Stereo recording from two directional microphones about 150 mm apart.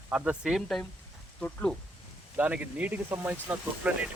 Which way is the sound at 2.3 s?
10° right (ahead or behind).